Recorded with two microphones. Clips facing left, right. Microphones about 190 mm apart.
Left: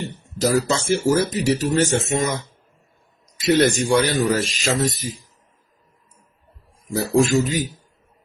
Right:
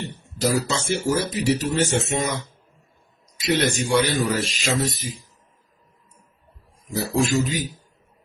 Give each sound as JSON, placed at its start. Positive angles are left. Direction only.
{"t": 0.4, "sound": "speech", "side_deg": 45}
{"t": 3.4, "sound": "speech", "side_deg": 45}
{"t": 6.9, "sound": "speech", "side_deg": 45}